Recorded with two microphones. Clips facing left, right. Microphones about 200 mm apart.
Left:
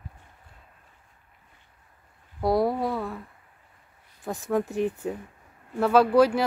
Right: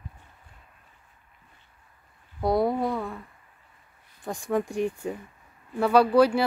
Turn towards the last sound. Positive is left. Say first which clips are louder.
# even
turn(degrees=5)  # may be behind; listen again after turning